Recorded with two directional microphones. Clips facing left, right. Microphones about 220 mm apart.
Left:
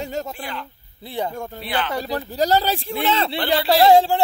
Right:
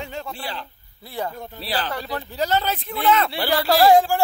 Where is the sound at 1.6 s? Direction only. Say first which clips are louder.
Left 1 dB; 35° right (ahead or behind).